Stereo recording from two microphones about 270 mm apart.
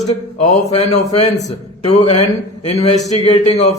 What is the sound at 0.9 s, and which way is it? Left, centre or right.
A man's voice, left.